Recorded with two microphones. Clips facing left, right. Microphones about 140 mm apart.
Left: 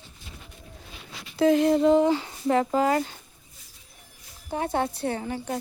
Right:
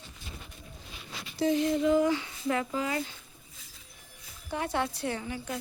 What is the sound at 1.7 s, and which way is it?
Speech, 35° left (ahead or behind).